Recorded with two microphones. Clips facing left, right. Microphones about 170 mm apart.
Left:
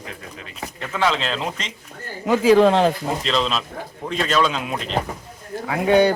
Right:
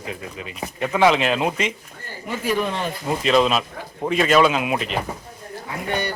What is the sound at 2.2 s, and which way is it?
Speech, 90° left.